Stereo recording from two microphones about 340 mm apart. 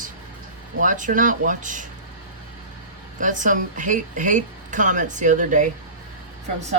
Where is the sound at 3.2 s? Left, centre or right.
Right.